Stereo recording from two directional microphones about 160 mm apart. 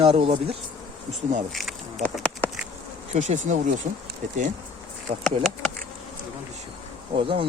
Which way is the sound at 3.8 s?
40° right (ahead or behind).